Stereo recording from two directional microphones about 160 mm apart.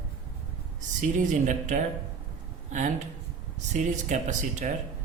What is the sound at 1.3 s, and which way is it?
Speech, 50° right (ahead or behind).